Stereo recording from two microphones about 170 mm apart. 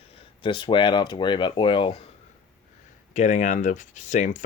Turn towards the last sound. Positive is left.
turn(degrees=45)  # may be behind; listen again after turning